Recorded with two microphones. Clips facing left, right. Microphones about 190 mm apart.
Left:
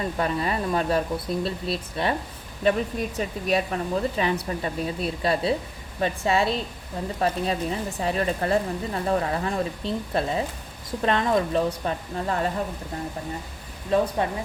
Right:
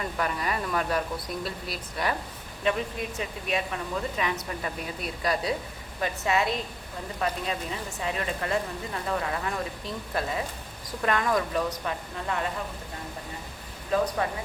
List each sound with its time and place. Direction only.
0.0 s speech: 25° left (ahead or behind)
3.2 s speech: 40° left (ahead or behind)
13.9 s speech: 30° left (ahead or behind)